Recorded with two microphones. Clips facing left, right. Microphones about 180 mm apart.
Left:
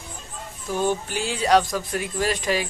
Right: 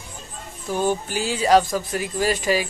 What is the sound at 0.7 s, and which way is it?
Speech, 5° right (ahead or behind).